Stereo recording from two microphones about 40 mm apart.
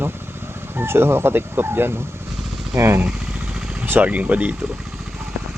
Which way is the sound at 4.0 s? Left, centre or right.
Right.